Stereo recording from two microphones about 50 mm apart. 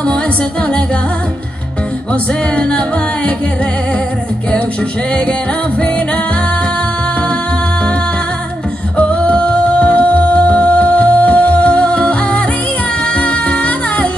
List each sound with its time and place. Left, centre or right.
8.9 s music: left